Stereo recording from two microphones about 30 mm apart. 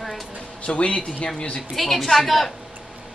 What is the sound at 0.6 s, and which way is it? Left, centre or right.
Speech, left.